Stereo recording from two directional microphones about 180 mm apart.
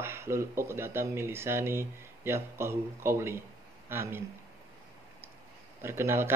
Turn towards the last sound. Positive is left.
turn(degrees=-15)  # may be behind; listen again after turning